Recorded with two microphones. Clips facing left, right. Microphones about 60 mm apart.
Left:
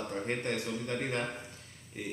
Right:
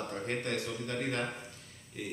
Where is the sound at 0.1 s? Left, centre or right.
Centre.